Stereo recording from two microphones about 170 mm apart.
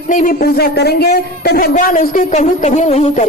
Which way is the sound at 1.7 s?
50° left (ahead or behind).